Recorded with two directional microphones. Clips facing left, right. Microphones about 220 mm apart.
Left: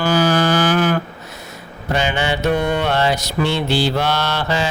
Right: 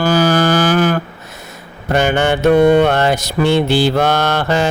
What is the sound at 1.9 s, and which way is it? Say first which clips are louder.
Mantra: right 6 dB; 50° right (ahead or behind).